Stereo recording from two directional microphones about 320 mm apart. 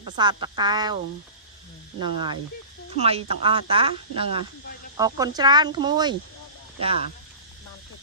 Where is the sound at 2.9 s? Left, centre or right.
Centre.